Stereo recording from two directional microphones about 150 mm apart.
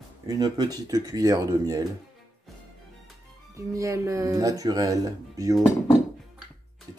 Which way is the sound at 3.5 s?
20° right (ahead or behind).